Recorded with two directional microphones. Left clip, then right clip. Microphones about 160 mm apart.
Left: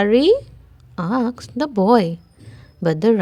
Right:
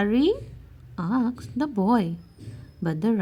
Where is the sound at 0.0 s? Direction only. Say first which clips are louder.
Left 9 dB; 40° left (ahead or behind).